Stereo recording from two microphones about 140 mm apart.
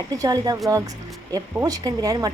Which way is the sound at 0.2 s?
25° right (ahead or behind).